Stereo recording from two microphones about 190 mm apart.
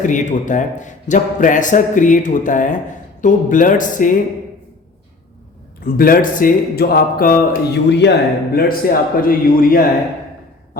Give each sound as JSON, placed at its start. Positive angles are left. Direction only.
{"t": 0.0, "sound": "speech", "side_deg": 40}
{"t": 5.8, "sound": "speech", "side_deg": 50}
{"t": 8.5, "sound": "speech", "side_deg": 50}